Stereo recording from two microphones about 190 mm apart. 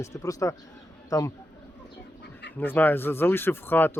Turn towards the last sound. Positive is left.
turn(degrees=10)  # may be behind; listen again after turning